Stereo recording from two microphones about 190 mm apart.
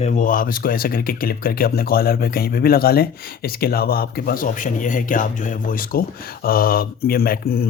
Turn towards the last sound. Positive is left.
turn(degrees=50)  # may be behind; listen again after turning